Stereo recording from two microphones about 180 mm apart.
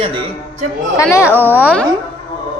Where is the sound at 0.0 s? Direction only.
30° right (ahead or behind).